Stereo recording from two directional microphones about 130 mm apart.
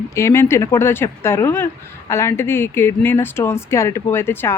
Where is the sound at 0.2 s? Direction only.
20° left (ahead or behind).